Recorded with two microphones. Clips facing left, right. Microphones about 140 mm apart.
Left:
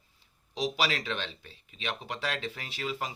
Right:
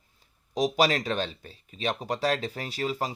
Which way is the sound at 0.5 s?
45° right (ahead or behind).